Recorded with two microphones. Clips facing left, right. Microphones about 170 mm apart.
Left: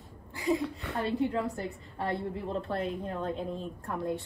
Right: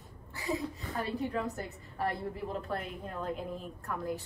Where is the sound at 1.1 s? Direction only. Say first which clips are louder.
Left 5 dB; 20° left (ahead or behind).